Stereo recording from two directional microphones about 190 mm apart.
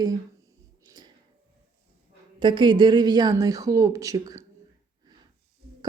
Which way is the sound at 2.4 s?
25° right (ahead or behind).